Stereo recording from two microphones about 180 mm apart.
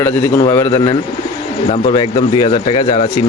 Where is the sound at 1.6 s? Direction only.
35° left (ahead or behind).